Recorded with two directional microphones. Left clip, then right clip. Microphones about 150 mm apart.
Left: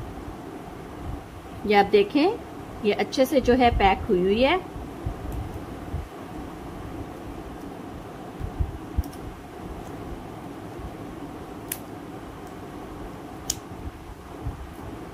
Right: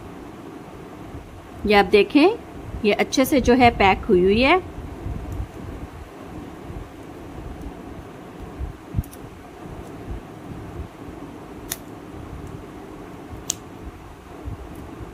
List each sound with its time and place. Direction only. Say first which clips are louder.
1.7 s a woman's voice: right 3 dB; 30° right (ahead or behind)